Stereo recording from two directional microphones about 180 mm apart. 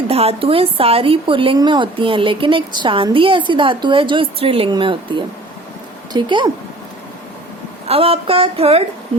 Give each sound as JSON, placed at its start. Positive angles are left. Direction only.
{"t": 0.1, "sound": "speech", "side_deg": -35}
{"t": 7.9, "sound": "speech", "side_deg": -35}